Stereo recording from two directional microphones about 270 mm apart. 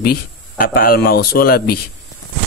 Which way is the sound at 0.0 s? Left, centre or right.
Left.